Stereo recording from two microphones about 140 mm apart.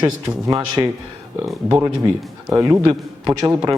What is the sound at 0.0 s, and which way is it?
Speech, 25° right (ahead or behind).